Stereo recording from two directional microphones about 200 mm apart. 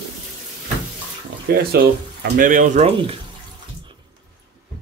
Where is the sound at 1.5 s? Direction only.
50° right (ahead or behind).